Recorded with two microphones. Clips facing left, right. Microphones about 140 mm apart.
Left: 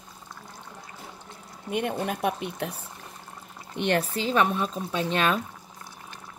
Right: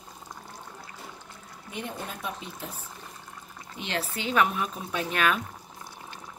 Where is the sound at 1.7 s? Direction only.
60° left (ahead or behind).